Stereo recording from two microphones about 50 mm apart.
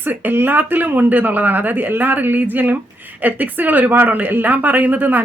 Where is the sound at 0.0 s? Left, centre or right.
Right.